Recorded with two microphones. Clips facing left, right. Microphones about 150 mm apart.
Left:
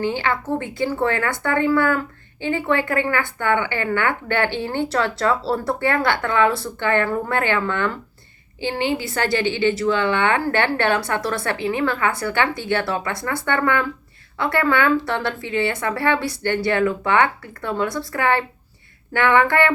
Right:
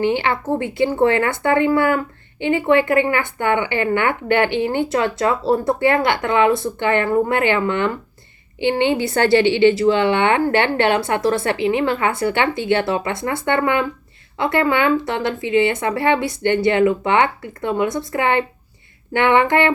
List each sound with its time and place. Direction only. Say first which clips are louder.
0.0 s a woman's voice: right 4 dB; 20° right (ahead or behind)
8.6 s a woman's voice: right 5 dB; 30° right (ahead or behind)